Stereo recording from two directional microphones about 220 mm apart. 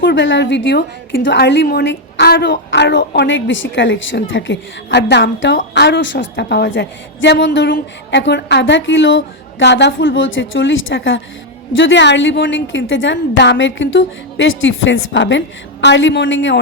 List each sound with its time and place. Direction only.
0.0 s a woman's voice: 55° left (ahead or behind)